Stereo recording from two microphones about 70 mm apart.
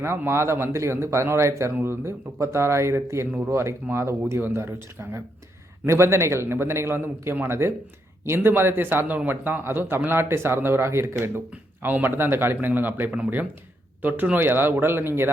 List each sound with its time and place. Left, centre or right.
0.0 s a man's voice: right